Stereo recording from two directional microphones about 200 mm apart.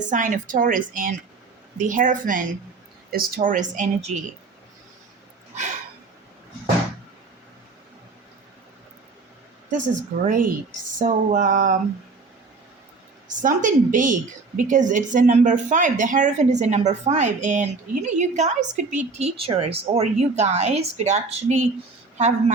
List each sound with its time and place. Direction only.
0.0 s a woman's voice: 40° right (ahead or behind)
9.7 s a woman's voice: 40° right (ahead or behind)
13.2 s a woman's voice: 40° right (ahead or behind)